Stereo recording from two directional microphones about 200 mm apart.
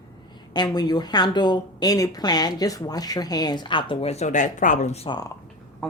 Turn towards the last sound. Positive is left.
turn(degrees=20)  # may be behind; listen again after turning